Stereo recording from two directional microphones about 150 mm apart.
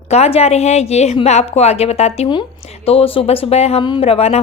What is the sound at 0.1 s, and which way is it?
A woman's voice, 45° left (ahead or behind).